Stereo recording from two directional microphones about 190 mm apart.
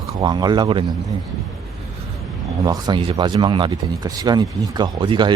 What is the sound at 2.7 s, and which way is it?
Speech, 25° right (ahead or behind).